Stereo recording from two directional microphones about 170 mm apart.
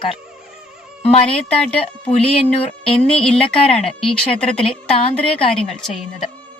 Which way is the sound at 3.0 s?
5° left (ahead or behind).